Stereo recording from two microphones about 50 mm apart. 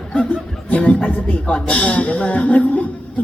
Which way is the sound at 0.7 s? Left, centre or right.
Left.